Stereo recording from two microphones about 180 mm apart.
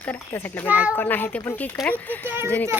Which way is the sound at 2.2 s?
10° right (ahead or behind).